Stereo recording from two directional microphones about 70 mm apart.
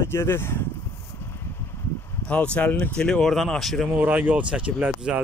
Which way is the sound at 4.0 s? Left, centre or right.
Right.